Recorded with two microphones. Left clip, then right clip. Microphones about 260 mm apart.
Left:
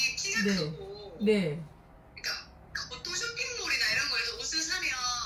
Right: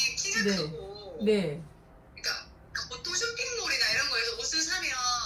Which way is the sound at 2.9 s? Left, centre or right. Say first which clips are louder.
Right 4 dB; centre.